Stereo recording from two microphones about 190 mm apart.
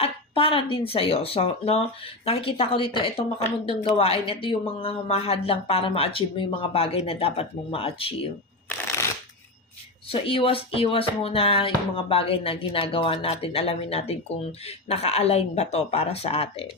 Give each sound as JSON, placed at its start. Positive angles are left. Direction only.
{"t": 0.0, "sound": "speech", "side_deg": 30}
{"t": 10.1, "sound": "speech", "side_deg": 30}